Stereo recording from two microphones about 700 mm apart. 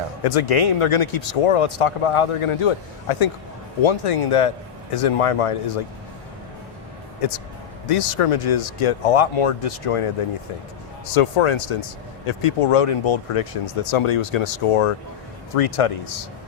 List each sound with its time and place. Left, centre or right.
0.3 s speech: left
7.9 s speech: left
11.1 s speech: left